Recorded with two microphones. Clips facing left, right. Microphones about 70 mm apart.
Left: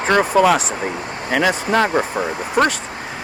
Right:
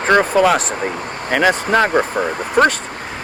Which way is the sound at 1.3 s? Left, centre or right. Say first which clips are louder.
Right 2 dB; right.